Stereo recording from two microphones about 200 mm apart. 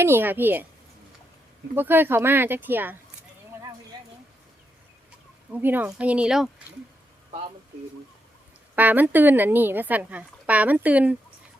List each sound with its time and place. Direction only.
0.0 s a woman's voice: 10° right (ahead or behind)
1.7 s a woman's voice: 10° right (ahead or behind)
3.9 s a sound: 20° right (ahead or behind)
5.5 s a woman's voice: 10° right (ahead or behind)
8.7 s a woman's voice: 10° right (ahead or behind)